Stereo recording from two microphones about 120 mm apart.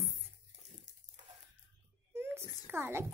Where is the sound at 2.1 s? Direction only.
20° right (ahead or behind).